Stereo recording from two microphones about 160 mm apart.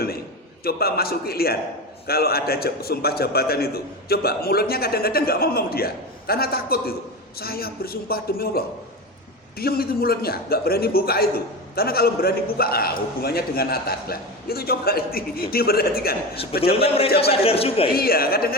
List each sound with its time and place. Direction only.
0.6 s a man's voice: 70° left (ahead or behind)
16.3 s a man's voice: 35° left (ahead or behind)
17.9 s a man's voice: 70° left (ahead or behind)